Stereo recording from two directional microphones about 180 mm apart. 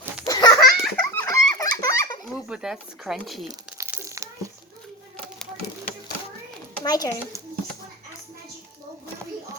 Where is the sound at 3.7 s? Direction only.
15° right (ahead or behind).